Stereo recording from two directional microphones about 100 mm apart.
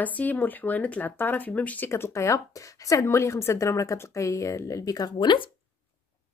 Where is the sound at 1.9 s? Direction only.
30° left (ahead or behind).